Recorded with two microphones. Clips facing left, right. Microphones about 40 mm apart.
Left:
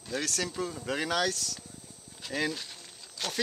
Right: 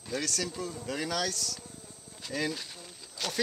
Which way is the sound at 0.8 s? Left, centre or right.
Left.